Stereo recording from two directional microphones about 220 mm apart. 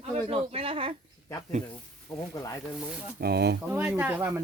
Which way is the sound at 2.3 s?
15° left (ahead or behind).